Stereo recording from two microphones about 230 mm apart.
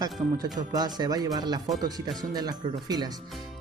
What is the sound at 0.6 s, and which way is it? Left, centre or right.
Speech, centre.